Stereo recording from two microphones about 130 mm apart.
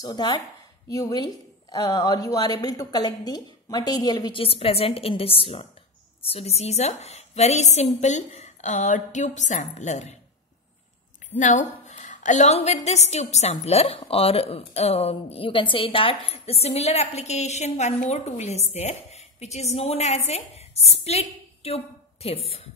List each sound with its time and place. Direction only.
0.0 s a woman's voice: 30° left (ahead or behind); by 10.1 s 65° left (ahead or behind)
11.3 s a woman's voice: 70° left (ahead or behind); by 22.6 s 50° left (ahead or behind)